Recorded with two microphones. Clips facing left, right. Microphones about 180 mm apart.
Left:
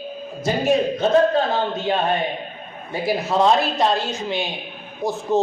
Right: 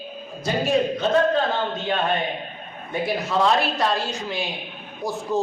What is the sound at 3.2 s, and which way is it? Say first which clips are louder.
A man's voice: left 3 dB; 25° left (ahead or behind).